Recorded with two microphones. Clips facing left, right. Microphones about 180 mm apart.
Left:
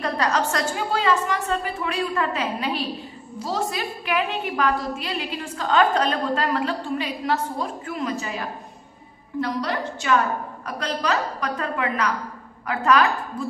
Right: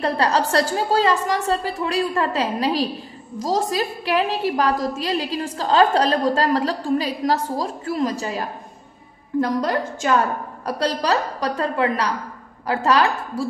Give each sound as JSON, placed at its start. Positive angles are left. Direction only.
{"t": 0.0, "sound": "a woman's voice", "side_deg": -30}